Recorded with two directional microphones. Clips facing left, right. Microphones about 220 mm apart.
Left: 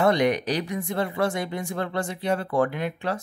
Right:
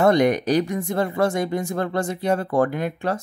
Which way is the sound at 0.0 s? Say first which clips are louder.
Right 4 dB; 45° right (ahead or behind).